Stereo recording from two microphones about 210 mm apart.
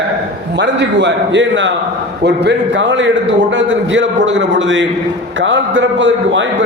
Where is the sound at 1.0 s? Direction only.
60° right (ahead or behind).